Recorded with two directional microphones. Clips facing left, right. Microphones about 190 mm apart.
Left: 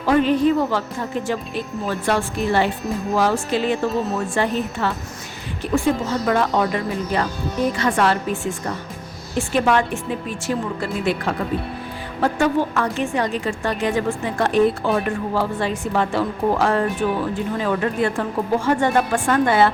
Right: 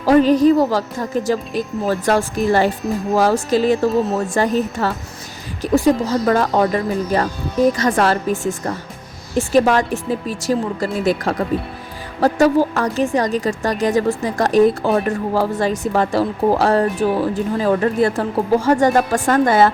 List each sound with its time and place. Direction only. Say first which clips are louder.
0.0 s a woman's voice: right 5 dB; 40° right (ahead or behind)